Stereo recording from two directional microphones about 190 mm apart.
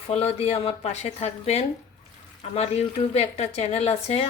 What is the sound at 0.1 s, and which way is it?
A woman's voice, 35° left (ahead or behind).